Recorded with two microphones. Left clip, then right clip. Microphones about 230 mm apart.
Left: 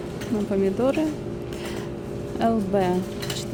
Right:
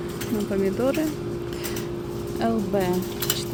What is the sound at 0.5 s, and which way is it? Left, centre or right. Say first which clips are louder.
Speech: left 1 dB; centre.